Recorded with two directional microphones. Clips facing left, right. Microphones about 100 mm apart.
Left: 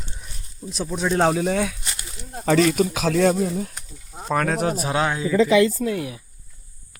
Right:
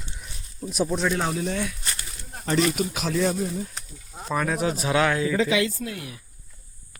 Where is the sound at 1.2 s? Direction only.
90° left.